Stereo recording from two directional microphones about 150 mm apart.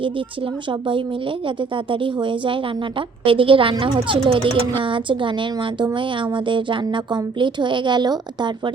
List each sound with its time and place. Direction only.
0.7 s a woman's voice: 35° right (ahead or behind)